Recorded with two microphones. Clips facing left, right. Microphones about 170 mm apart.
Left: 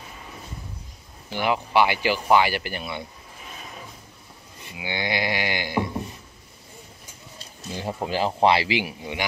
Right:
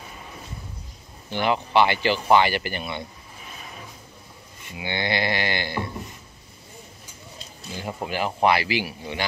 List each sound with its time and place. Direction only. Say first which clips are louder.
1.3 s livestock: right 1 dB; 5° left (ahead or behind)
2.2 s speech: right 1 dB; 5° left (ahead or behind)
4.7 s livestock: right 1 dB; 10° left (ahead or behind)
7.7 s speech: left 2 dB; 30° left (ahead or behind)